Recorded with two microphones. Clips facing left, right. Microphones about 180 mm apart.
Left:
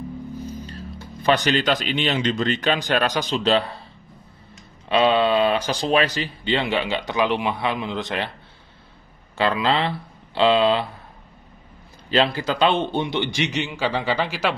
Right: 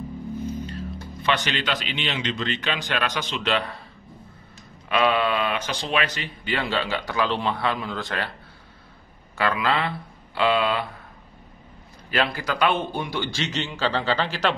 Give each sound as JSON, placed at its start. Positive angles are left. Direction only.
{"t": 1.2, "sound": "a man's voice", "side_deg": 40}
{"t": 4.8, "sound": "speech", "side_deg": 30}
{"t": 9.4, "sound": "speech", "side_deg": 25}
{"t": 12.1, "sound": "speech", "side_deg": 25}